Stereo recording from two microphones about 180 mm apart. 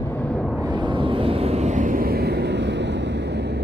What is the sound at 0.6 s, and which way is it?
Vehicle, 25° right (ahead or behind).